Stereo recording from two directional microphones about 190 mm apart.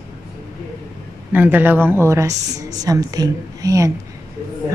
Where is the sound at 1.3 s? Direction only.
10° right (ahead or behind).